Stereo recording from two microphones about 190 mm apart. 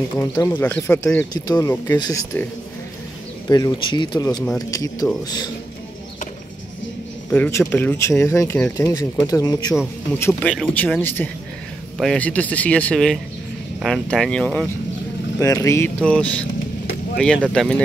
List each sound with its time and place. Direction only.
0.2 s speech: 20° left (ahead or behind)
0.5 s speech: 10° left (ahead or behind)
1.3 s speech: 20° left (ahead or behind)
3.4 s speech: 20° left (ahead or behind)
7.2 s speech: 10° left (ahead or behind)
10.1 s speech: 10° left (ahead or behind)
15.3 s speech: 15° left (ahead or behind)
17.5 s speech: 5° left (ahead or behind)